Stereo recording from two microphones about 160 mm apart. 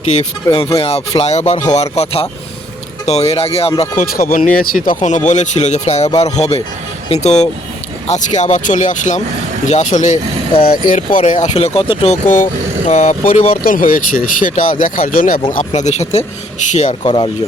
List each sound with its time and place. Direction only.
0.4 s speech: 35° left (ahead or behind)
3.9 s speech: 60° left (ahead or behind)
4.9 s speech: 50° left (ahead or behind)
13.6 s speech: 60° left (ahead or behind); by 16.2 s 45° left (ahead or behind)
17.0 s speech: 30° left (ahead or behind)